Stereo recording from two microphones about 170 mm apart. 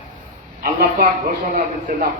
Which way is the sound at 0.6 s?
55° right (ahead or behind).